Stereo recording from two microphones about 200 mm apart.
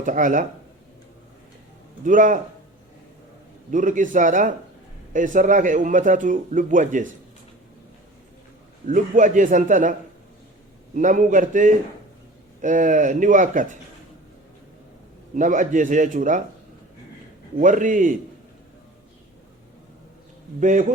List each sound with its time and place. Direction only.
0.0 s speech: 40° right (ahead or behind)
2.0 s speech: 40° right (ahead or behind)
3.7 s speech: 40° right (ahead or behind)
8.9 s speech: 40° right (ahead or behind)
10.9 s speech: 40° right (ahead or behind)
15.4 s speech: 40° right (ahead or behind)
17.6 s speech: 40° right (ahead or behind)
20.6 s speech: 40° right (ahead or behind)